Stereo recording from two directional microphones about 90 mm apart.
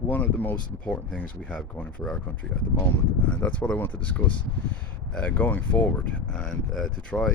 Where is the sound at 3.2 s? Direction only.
15° left (ahead or behind).